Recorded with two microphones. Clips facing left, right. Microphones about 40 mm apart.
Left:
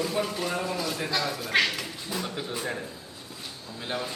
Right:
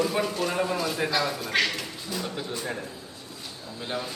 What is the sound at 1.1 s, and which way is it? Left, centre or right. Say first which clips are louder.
Speech: even; centre.